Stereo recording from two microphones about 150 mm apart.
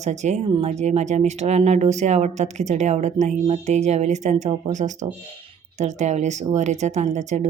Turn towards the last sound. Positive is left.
turn(degrees=-50)  # may be behind; listen again after turning